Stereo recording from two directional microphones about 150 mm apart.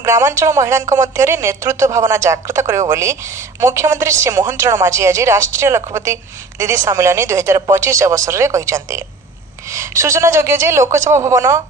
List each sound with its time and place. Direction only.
0.0 s a woman's voice: 20° right (ahead or behind)